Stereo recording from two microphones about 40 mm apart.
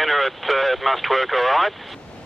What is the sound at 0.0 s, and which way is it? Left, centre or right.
Speech, centre.